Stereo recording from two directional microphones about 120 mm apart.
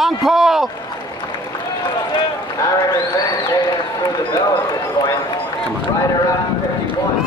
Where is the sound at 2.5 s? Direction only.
30° left (ahead or behind).